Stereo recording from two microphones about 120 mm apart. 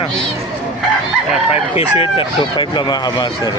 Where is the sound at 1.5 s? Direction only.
50° left (ahead or behind); by 3.5 s 35° left (ahead or behind).